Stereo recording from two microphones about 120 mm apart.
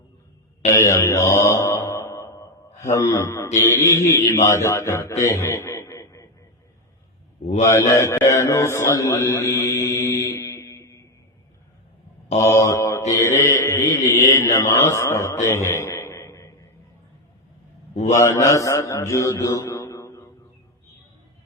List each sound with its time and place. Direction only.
0.7 s mantra: 25° left (ahead or behind)
7.6 s a sound: 25° left (ahead or behind)
12.4 s mantra: 25° left (ahead or behind)
17.9 s a man's voice: 70° left (ahead or behind)
18.2 s a man's voice: 25° left (ahead or behind)